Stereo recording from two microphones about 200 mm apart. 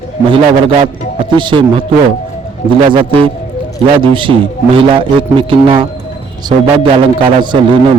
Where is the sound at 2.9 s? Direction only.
25° right (ahead or behind).